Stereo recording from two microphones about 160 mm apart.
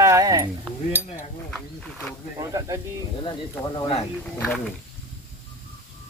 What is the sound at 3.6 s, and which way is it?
Speech, 25° left (ahead or behind).